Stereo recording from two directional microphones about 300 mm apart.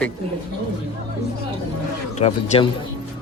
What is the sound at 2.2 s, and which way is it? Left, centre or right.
Speech, left.